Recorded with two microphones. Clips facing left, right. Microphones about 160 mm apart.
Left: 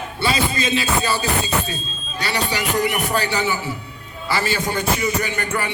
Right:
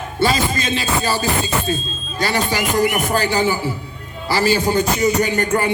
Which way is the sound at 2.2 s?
45° right (ahead or behind).